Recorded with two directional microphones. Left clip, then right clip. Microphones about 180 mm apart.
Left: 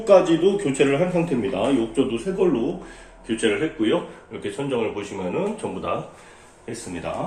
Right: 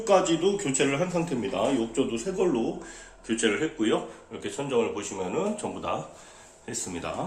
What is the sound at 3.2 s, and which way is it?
Speech, 10° right (ahead or behind).